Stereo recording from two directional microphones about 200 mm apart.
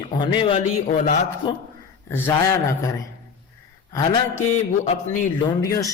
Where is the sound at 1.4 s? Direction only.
25° left (ahead or behind).